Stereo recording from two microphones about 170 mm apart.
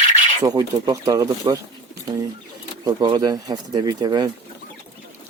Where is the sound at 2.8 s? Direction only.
25° right (ahead or behind).